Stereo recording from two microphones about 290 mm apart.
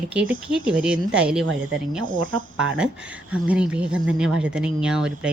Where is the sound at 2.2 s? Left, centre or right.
Right.